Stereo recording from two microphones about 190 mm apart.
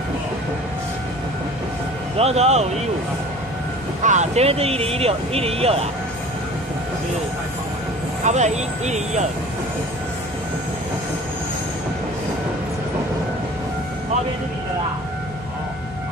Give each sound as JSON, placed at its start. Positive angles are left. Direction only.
{"t": 2.1, "sound": "speech", "side_deg": -35}
{"t": 4.0, "sound": "speech", "side_deg": -40}
{"t": 8.3, "sound": "speech", "side_deg": -40}